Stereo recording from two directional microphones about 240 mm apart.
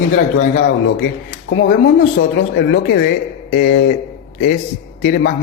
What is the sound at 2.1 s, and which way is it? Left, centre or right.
A man's voice, left.